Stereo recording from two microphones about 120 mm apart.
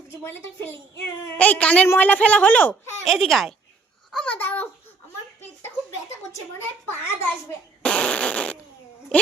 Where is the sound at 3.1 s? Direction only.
Centre (ahead or behind).